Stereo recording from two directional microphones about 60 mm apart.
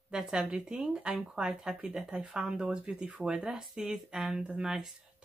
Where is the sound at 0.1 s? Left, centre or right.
Centre.